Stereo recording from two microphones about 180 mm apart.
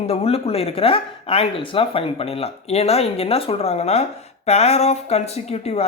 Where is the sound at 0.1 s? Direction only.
35° left (ahead or behind).